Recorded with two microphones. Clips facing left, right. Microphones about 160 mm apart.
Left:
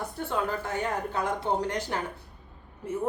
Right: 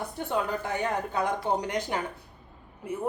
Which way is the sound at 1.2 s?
15° right (ahead or behind).